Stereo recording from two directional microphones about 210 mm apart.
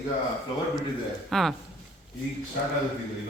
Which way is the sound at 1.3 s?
Centre (ahead or behind).